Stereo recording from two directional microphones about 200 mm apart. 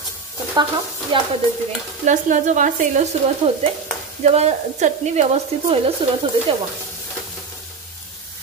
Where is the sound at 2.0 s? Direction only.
40° right (ahead or behind).